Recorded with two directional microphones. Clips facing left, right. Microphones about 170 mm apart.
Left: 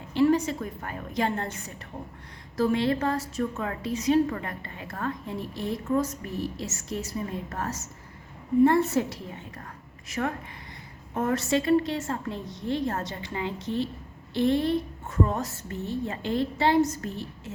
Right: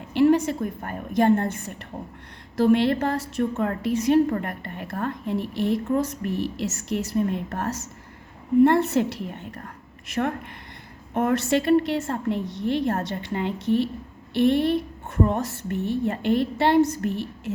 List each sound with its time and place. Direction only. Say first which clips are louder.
0.1 s a sound: right 4 dB; 60° right (ahead or behind)
0.9 s a woman's voice: right 9 dB; 55° right (ahead or behind)
2.6 s a woman's voice: right 5 dB; 65° right (ahead or behind)
11.1 s a woman's voice: right 4 dB; 65° right (ahead or behind)